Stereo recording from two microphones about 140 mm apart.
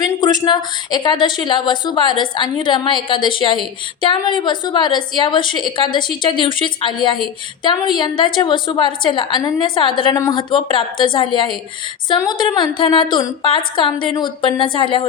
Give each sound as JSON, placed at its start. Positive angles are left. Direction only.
{"t": 0.0, "sound": "a woman's voice", "side_deg": 30}